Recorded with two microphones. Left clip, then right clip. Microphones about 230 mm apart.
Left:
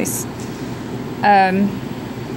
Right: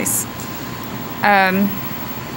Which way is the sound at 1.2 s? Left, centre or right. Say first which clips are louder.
Left 1 dB; centre.